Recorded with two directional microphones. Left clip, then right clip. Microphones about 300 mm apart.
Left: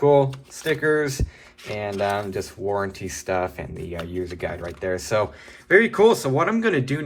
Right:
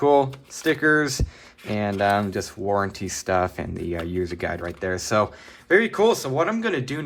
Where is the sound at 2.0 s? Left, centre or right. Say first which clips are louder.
Right 3 dB; right.